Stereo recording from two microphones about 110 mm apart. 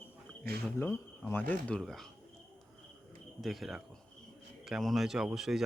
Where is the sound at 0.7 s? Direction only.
20° left (ahead or behind).